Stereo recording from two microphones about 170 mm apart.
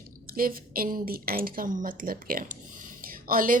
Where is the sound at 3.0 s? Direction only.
55° right (ahead or behind).